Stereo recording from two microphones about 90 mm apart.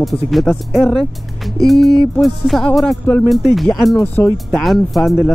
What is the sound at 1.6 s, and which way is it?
Speech, centre (ahead or behind).